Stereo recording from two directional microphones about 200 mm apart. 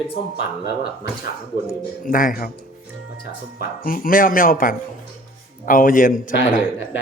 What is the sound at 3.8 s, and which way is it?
Speech, 45° left (ahead or behind).